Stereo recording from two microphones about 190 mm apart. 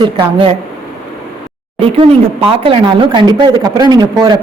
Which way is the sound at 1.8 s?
30° right (ahead or behind).